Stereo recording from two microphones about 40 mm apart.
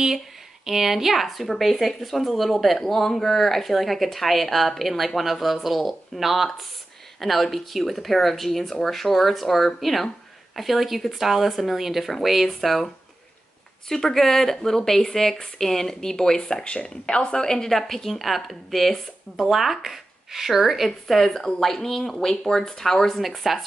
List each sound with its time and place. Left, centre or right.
0.7 s speech: centre
16.6 s speech: left
17.6 s speech: centre
23.2 s speech: centre